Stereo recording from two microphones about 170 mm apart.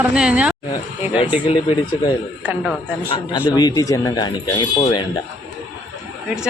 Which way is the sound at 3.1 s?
25° left (ahead or behind).